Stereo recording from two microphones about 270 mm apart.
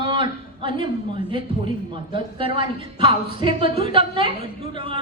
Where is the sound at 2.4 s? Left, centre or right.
Centre.